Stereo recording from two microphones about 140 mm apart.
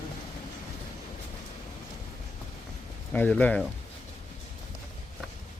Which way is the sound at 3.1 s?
10° left (ahead or behind).